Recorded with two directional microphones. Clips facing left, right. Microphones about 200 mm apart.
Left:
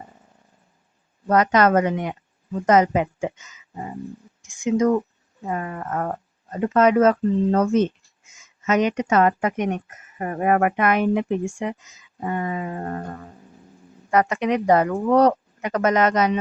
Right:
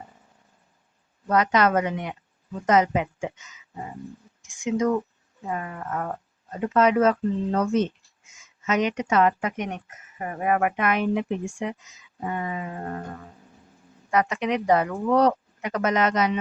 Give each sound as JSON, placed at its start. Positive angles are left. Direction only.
{"t": 1.3, "sound": "speech", "side_deg": 45}
{"t": 14.1, "sound": "speech", "side_deg": 50}